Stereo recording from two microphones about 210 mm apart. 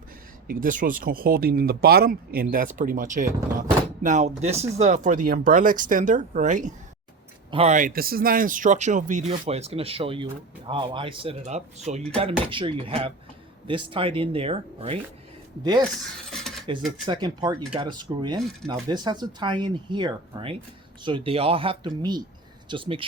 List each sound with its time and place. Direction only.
0.4 s speech: 40° right (ahead or behind)
16.3 s cutlery: centre (ahead or behind)
17.1 s speech: 20° right (ahead or behind)